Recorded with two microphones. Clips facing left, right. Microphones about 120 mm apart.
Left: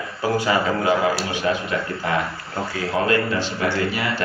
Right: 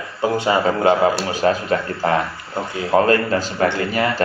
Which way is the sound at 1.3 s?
40° right (ahead or behind).